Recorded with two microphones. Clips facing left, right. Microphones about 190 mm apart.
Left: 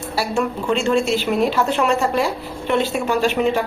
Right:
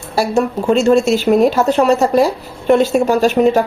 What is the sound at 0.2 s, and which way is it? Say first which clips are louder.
Speech: right 6 dB; 40° right (ahead or behind).